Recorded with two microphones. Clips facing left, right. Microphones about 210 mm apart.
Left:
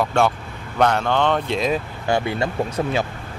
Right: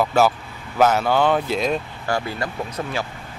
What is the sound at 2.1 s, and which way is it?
Speech, 25° left (ahead or behind).